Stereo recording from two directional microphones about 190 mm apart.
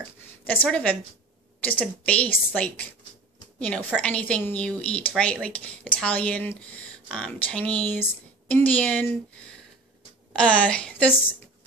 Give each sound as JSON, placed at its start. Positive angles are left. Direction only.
{"t": 0.5, "sound": "speech", "side_deg": 10}
{"t": 10.3, "sound": "speech", "side_deg": 5}